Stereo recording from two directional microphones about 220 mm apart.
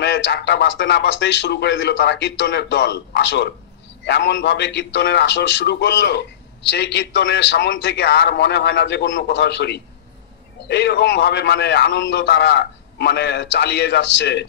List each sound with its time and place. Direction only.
0.0 s a man's voice: 50° left (ahead or behind)